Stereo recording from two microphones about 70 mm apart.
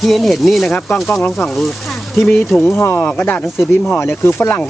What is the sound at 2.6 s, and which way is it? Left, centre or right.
Speech, left.